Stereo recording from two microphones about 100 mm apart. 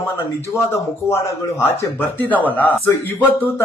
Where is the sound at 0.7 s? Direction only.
25° left (ahead or behind).